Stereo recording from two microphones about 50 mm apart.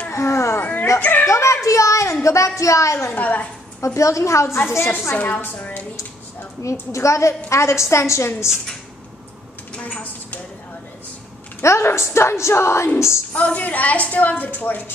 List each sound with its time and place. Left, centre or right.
0.1 s baby cry: left
0.6 s a sound: left
1.2 s a sound: left
2.2 s a woman's voice: left
3.2 s a woman's voice: left
3.8 s a woman's voice: left
5.1 s a woman's voice: left
5.6 s a sound: left
6.6 s a woman's voice: left
9.8 s a sound: left
11.6 s a woman's voice: left
13.3 s a woman's voice: left